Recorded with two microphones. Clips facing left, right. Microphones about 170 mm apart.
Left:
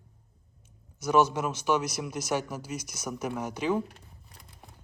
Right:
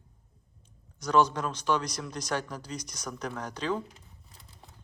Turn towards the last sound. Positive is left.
turn(degrees=10)  # may be behind; listen again after turning